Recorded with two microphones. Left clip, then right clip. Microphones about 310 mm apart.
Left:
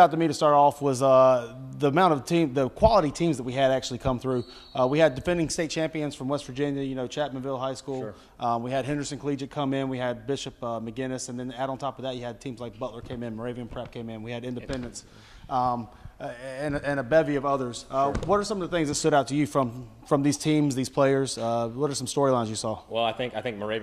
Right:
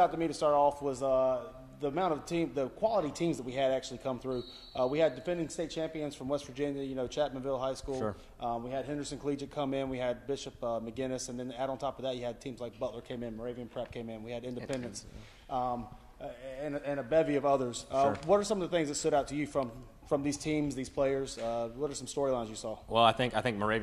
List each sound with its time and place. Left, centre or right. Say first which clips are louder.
0.0 s a man's voice: left 9 dB; left
3.1 s a man's voice: left 7 dB; left
13.7 s a man's voice: left 3 dB; left
15.5 s a man's voice: left 8 dB; left; by 18.8 s centre
18.9 s a man's voice: left 7 dB; left
22.9 s speech: right 2 dB; centre